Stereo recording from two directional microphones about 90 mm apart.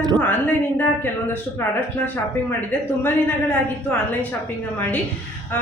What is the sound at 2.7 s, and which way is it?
Speech, 15° left (ahead or behind).